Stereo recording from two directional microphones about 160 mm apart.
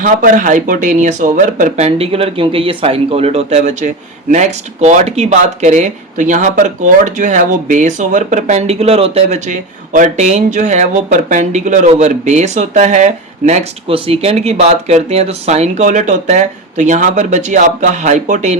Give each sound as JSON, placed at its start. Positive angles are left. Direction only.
{"t": 0.0, "sound": "speech", "side_deg": -55}
{"t": 9.5, "sound": "speech", "side_deg": -50}